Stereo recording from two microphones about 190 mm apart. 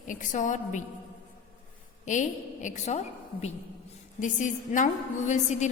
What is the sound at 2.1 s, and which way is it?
Speech, 40° left (ahead or behind).